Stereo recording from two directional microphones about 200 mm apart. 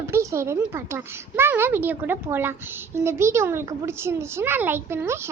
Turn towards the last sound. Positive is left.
turn(degrees=-15)  # may be behind; listen again after turning